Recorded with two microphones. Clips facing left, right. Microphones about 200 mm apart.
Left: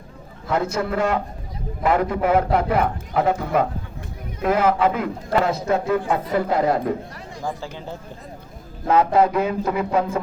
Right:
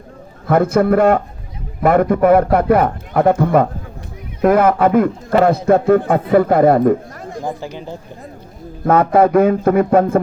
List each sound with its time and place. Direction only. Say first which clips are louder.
0.4 s a man's voice: right 9 dB; 55° right (ahead or behind)
7.4 s speech: right 3 dB; 15° right (ahead or behind)
8.9 s a man's voice: right 5 dB; 55° right (ahead or behind)